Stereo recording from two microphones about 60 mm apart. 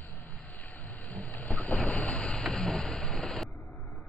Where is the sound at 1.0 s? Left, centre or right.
Left.